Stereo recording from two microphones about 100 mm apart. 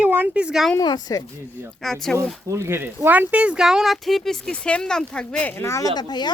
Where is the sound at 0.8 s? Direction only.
40° left (ahead or behind).